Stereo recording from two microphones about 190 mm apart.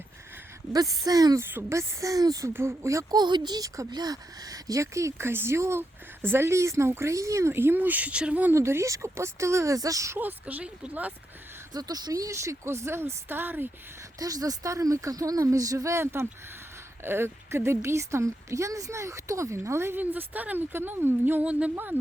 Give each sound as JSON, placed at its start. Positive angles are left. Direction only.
{"t": 0.7, "sound": "speech", "side_deg": -20}
{"t": 11.7, "sound": "speech", "side_deg": -20}